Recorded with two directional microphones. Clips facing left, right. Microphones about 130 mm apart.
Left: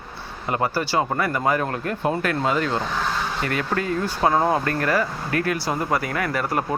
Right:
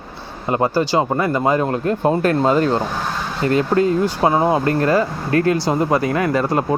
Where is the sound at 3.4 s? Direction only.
25° right (ahead or behind).